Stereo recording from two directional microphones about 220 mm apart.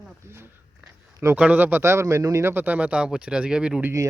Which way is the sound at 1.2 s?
5° right (ahead or behind).